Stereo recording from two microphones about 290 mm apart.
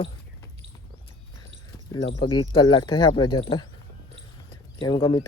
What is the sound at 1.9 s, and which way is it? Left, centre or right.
Speech, centre.